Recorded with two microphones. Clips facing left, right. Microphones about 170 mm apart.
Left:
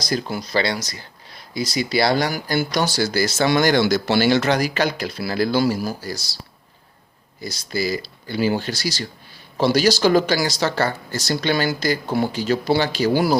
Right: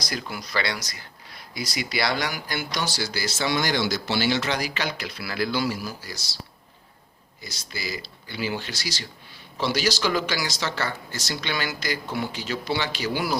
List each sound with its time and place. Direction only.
0.0 s speech: 30° left (ahead or behind)
7.4 s speech: 35° left (ahead or behind)